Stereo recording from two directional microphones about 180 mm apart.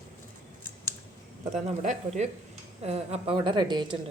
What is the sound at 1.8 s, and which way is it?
A woman's voice, 40° right (ahead or behind).